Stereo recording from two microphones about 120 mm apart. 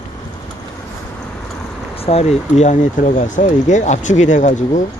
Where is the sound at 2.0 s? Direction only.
65° left (ahead or behind); by 4.8 s 90° left.